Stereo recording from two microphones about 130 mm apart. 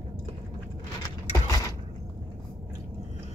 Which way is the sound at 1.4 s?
25° left (ahead or behind).